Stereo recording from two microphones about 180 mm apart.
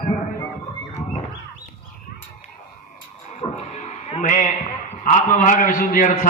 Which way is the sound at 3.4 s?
40° left (ahead or behind).